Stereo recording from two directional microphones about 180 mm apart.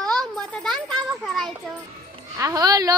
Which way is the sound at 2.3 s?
20° right (ahead or behind).